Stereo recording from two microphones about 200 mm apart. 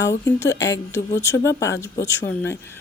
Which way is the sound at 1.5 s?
60° left (ahead or behind).